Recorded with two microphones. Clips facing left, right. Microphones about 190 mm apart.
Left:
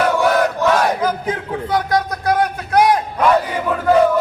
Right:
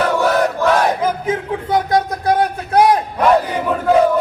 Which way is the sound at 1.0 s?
25° right (ahead or behind).